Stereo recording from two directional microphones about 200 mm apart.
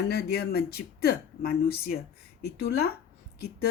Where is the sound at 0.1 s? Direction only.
50° left (ahead or behind).